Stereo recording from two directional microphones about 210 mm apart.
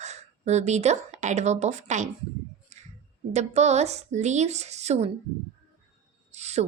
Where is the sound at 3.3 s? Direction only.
30° right (ahead or behind).